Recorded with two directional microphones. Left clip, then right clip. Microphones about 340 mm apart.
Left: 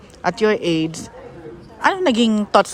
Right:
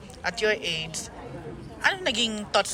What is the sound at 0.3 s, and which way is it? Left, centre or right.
Speech, left.